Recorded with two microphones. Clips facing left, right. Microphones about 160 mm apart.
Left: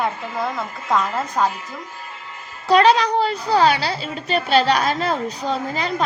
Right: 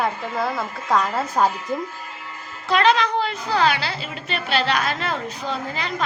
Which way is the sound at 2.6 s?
35° left (ahead or behind).